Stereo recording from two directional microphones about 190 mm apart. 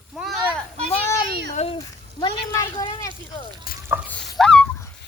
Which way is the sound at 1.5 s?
30° left (ahead or behind).